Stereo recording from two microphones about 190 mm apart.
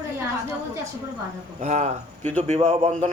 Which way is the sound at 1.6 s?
35° right (ahead or behind).